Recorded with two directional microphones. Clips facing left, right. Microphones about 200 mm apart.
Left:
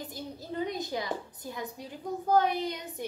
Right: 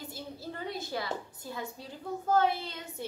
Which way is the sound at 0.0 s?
15° left (ahead or behind).